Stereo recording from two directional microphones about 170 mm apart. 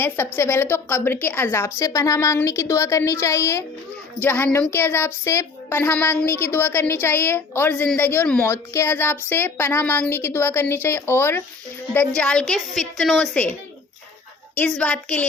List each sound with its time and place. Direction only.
0.0 s a woman's voice: 15° left (ahead or behind)